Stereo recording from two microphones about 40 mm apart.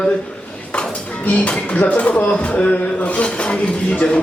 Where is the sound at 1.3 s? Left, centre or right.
Left.